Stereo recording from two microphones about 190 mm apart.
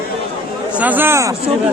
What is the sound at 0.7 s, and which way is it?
Speech, 10° right (ahead or behind).